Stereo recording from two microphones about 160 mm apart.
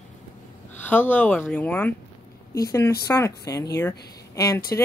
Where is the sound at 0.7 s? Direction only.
10° left (ahead or behind).